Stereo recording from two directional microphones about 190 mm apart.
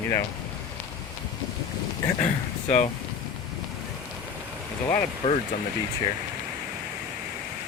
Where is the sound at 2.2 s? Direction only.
35° left (ahead or behind).